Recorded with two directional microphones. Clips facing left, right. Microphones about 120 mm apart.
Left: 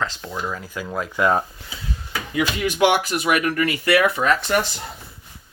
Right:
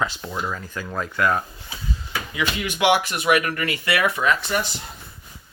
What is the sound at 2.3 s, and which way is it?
Speech, 45° left (ahead or behind).